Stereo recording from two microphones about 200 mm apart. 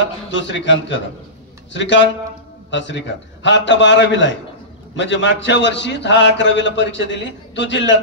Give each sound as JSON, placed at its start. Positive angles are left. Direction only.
{"t": 0.3, "sound": "a man's voice", "side_deg": 65}